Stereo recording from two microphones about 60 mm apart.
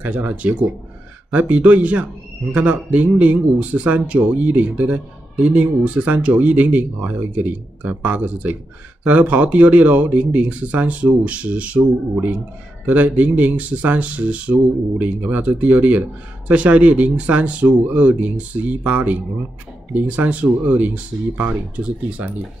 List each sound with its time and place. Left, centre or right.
0.0 s speech: right
12.8 s speech: right